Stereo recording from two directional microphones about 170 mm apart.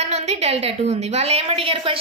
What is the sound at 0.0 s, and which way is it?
A woman's voice, 40° right (ahead or behind).